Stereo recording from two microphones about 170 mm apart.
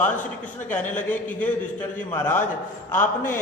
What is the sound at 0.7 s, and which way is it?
A man's voice, 10° left (ahead or behind).